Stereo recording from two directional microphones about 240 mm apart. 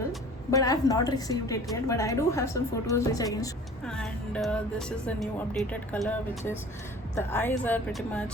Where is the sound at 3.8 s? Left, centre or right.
Centre.